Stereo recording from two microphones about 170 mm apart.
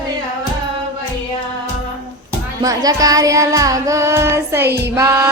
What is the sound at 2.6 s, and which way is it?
Child singing, 20° right (ahead or behind).